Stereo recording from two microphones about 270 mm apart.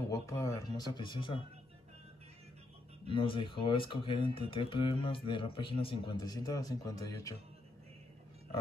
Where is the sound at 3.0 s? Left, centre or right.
Centre.